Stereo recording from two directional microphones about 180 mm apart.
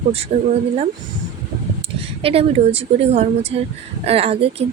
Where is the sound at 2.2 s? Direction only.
35° right (ahead or behind).